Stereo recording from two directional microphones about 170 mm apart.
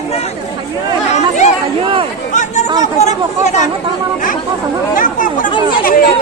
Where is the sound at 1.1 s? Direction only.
45° left (ahead or behind).